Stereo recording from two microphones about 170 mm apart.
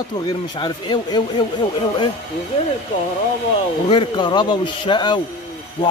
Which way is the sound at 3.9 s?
30° left (ahead or behind).